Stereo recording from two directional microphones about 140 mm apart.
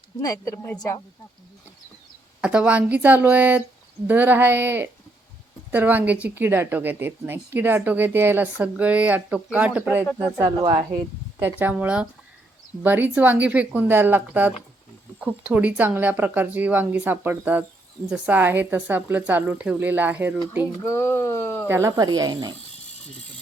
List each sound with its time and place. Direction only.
0.2 s speech: 25° left (ahead or behind)
2.4 s speech: 10° right (ahead or behind)
10.6 s speech: 30° right (ahead or behind)
11.3 s speech: 15° right (ahead or behind)
20.8 s speech: 20° left (ahead or behind)
21.7 s speech: 20° right (ahead or behind)